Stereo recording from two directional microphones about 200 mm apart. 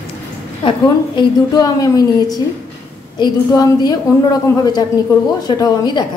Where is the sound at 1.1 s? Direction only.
20° left (ahead or behind).